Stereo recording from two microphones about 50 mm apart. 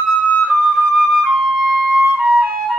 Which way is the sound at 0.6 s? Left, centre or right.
Centre.